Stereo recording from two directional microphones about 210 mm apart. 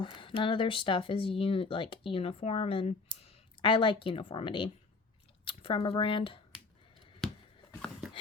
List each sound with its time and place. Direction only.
0.0 s speech: 25° left (ahead or behind)